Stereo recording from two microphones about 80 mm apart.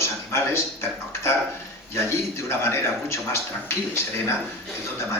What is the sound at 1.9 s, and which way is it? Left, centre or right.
A man's voice, left.